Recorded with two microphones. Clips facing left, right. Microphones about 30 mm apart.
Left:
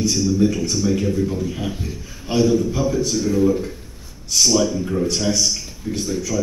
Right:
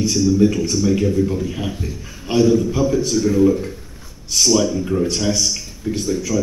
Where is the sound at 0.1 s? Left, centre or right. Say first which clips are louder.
Right 3 dB; centre.